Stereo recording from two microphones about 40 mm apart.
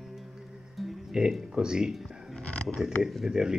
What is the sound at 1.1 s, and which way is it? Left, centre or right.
Speech, centre.